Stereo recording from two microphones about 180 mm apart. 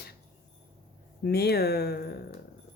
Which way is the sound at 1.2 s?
60° left (ahead or behind).